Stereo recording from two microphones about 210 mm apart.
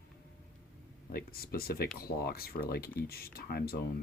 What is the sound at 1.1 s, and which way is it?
Speech, 45° left (ahead or behind).